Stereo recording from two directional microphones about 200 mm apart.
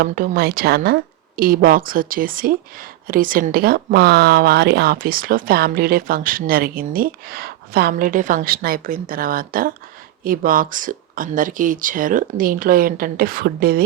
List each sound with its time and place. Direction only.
0.0 s speech: 50° right (ahead or behind)